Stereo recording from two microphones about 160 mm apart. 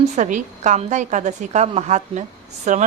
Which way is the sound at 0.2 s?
50° right (ahead or behind).